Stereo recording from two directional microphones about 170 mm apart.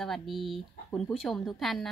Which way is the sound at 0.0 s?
Centre (ahead or behind).